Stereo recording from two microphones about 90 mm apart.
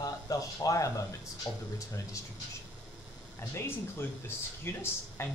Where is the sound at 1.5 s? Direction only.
50° left (ahead or behind).